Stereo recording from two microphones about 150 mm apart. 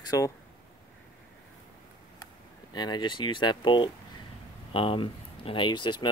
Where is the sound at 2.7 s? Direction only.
30° left (ahead or behind).